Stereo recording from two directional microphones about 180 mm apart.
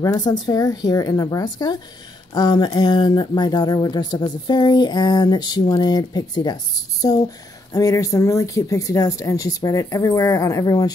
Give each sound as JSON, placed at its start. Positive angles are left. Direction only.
{"t": 0.0, "sound": "speech", "side_deg": 20}